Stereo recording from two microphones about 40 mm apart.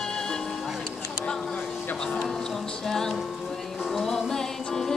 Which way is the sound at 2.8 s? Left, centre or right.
Centre.